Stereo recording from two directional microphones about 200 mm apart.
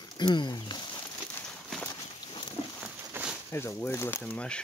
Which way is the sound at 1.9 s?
20° left (ahead or behind).